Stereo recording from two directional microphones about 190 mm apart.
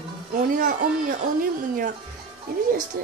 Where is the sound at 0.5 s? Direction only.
45° right (ahead or behind).